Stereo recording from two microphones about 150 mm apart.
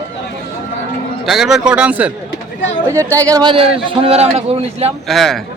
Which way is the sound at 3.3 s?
30° right (ahead or behind).